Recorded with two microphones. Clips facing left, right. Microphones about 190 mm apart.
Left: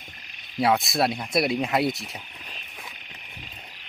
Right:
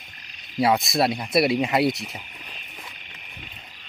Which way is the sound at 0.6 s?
Centre (ahead or behind).